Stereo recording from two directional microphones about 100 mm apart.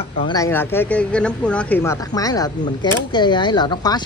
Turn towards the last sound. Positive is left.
turn(degrees=45)  # may be behind; listen again after turning